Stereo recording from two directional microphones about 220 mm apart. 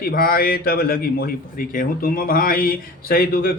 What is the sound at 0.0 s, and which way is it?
Speech, 40° left (ahead or behind).